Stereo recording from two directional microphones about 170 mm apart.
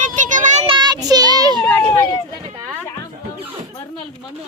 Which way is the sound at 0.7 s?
25° right (ahead or behind).